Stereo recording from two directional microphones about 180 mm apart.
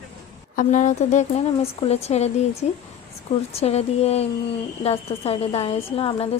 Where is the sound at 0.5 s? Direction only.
45° left (ahead or behind).